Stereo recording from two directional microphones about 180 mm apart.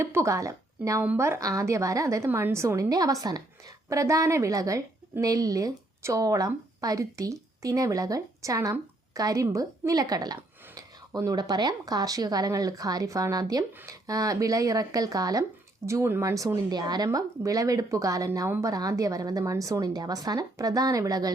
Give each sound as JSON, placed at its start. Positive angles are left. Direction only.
{"t": 0.0, "sound": "speech", "side_deg": -15}